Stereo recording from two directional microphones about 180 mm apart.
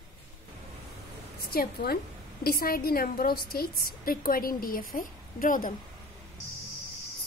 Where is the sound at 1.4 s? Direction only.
60° left (ahead or behind).